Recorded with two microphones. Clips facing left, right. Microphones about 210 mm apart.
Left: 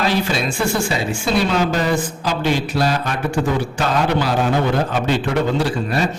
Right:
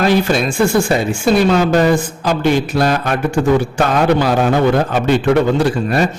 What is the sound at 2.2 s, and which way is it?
Speech, 50° right (ahead or behind).